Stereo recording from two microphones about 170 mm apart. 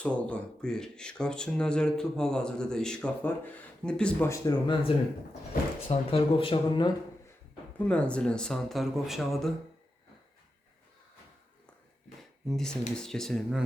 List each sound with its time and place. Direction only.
0.0 s speech: 5° left (ahead or behind)
4.3 s speech: 20° left (ahead or behind)
5.9 s speech: 35° left (ahead or behind)
7.9 s speech: 5° left (ahead or behind)
12.5 s speech: 5° left (ahead or behind)